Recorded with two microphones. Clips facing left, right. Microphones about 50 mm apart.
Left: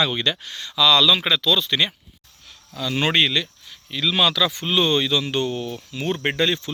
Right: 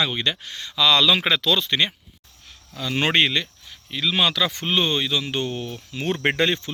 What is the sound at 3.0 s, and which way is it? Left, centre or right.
Speech, right.